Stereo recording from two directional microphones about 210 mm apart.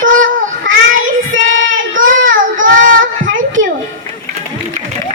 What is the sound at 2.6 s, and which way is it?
Child singing, 40° right (ahead or behind).